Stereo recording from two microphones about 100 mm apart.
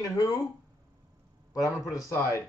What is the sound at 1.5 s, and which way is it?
Speech, 35° left (ahead or behind).